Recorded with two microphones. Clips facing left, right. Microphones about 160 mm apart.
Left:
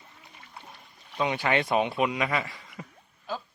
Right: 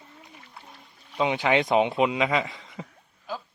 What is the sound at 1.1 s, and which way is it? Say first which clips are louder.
Speech: right 3 dB; 15° right (ahead or behind).